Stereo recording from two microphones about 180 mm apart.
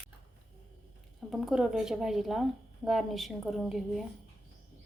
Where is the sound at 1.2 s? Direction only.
Centre (ahead or behind).